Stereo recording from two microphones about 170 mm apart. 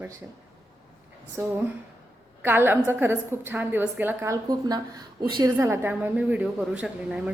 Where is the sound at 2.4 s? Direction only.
10° right (ahead or behind).